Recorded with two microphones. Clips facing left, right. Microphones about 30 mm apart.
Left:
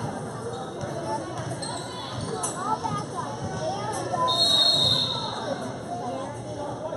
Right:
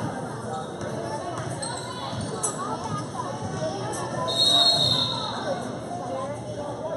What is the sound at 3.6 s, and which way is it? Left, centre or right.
Basketball bounce, centre.